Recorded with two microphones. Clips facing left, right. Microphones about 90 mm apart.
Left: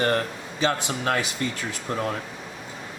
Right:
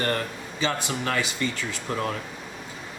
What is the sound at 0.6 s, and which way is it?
Speech, 40° left (ahead or behind).